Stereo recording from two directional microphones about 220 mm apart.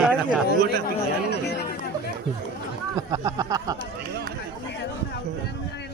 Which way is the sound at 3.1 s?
15° right (ahead or behind).